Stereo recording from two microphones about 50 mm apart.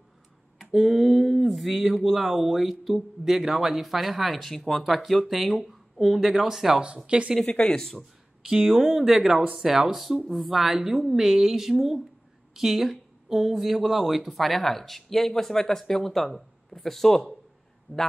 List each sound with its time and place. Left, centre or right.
0.6 s speech: centre
7.1 s speech: right
7.4 s speech: centre
8.5 s speech: centre